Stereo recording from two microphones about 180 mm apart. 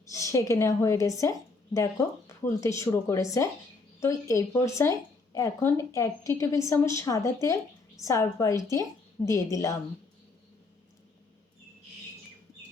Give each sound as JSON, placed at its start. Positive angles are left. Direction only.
{"t": 0.1, "sound": "speech", "side_deg": 15}